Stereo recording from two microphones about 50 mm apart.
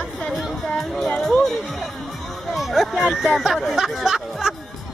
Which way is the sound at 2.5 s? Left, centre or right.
Centre.